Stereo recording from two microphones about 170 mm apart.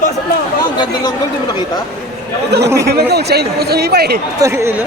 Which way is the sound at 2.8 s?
70° right (ahead or behind).